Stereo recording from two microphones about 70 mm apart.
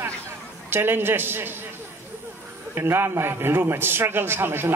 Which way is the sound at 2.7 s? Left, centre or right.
Right.